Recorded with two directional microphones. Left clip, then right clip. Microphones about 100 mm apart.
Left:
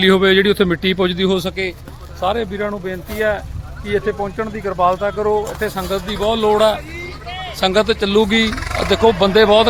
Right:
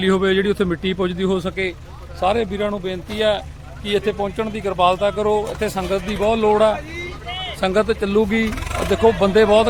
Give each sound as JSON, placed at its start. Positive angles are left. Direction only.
{"t": 0.0, "sound": "speech", "side_deg": 30}
{"t": 1.4, "sound": "a man's voice", "side_deg": 5}
{"t": 2.2, "sound": "speech", "side_deg": -35}
{"t": 2.6, "sound": "speech", "side_deg": -20}
{"t": 5.5, "sound": "speech", "side_deg": -25}
{"t": 6.1, "sound": "speech", "side_deg": -10}
{"t": 6.5, "sound": "a man's voice", "side_deg": 15}
{"t": 8.5, "sound": "a sound", "side_deg": 0}
{"t": 8.9, "sound": "speech", "side_deg": 20}